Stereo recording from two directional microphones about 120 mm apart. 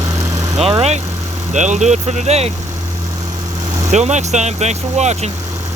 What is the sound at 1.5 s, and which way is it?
Speech, 80° right.